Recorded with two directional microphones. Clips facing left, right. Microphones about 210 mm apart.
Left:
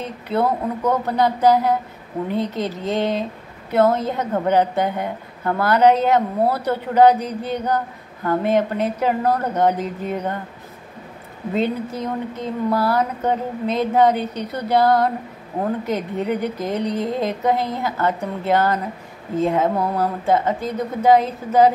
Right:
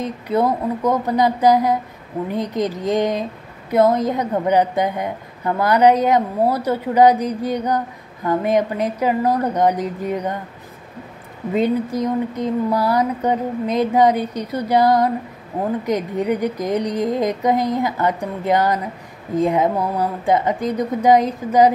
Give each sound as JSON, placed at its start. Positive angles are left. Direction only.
{"t": 0.3, "sound": "a woman's voice", "side_deg": -10}
{"t": 11.5, "sound": "a woman's voice", "side_deg": -15}